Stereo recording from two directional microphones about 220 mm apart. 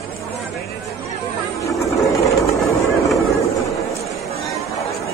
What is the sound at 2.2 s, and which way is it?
Vehicle, centre (ahead or behind).